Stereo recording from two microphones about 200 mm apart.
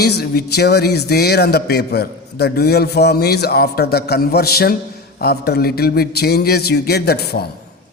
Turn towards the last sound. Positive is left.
turn(degrees=50)  # may be behind; listen again after turning